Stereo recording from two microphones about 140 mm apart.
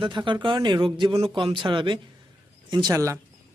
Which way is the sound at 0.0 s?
35° right (ahead or behind).